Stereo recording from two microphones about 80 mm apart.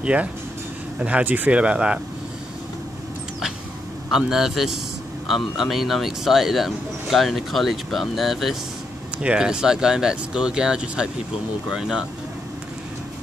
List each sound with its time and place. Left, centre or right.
0.0 s speech: centre
4.1 s speech: centre